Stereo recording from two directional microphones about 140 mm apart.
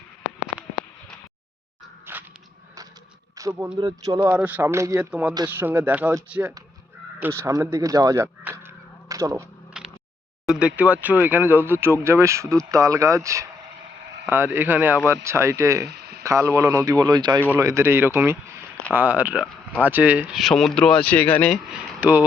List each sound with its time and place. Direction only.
2.1 s a sound: 15° right (ahead or behind)
3.3 s speech: 25° right (ahead or behind)
4.3 s speech: 10° right (ahead or behind)
7.2 s speech: 20° right (ahead or behind)
9.0 s a sound: 25° right (ahead or behind)
10.4 s speech: 5° right (ahead or behind); by 17.4 s 30° right (ahead or behind)
17.5 s speech: 20° right (ahead or behind); by 21.6 s 10° left (ahead or behind)
21.7 s speech: 5° right (ahead or behind)